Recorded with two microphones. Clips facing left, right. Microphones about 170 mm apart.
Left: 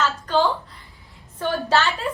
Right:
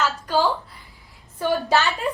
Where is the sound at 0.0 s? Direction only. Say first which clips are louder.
Left 1 dB; 5° right (ahead or behind).